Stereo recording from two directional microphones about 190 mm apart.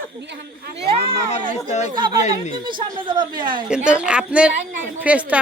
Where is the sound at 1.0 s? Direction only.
35° left (ahead or behind).